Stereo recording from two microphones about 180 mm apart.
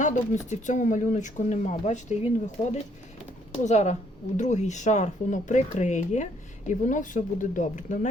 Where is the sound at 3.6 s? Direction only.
40° left (ahead or behind).